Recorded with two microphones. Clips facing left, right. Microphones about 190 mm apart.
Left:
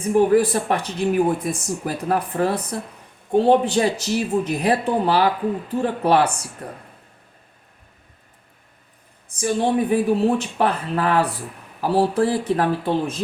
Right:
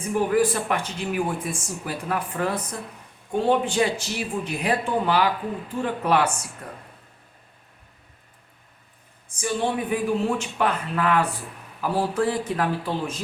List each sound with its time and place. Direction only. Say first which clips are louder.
0.1 s speech: left 5 dB; 40° left (ahead or behind)
9.3 s speech: left 5 dB; 35° left (ahead or behind)